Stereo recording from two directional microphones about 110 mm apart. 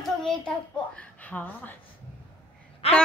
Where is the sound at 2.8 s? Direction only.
70° left (ahead or behind).